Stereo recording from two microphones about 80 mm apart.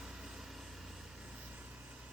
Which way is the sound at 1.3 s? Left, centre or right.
Centre.